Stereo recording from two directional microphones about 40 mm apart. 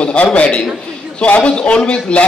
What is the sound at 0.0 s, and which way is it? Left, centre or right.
A man's voice, left.